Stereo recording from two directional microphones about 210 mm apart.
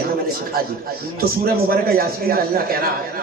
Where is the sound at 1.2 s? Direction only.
45° right (ahead or behind).